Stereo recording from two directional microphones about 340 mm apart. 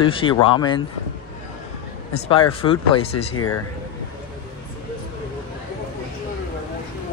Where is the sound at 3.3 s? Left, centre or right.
Left.